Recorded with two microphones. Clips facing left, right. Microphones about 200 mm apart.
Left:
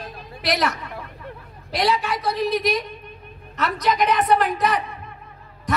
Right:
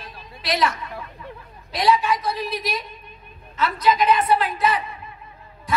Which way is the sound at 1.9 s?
65° left (ahead or behind).